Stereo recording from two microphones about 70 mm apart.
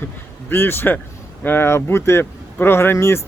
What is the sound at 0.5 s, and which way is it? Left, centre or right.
Speech, left.